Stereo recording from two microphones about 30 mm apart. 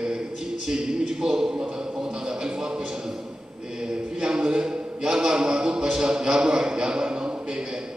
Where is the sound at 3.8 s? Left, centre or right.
Centre.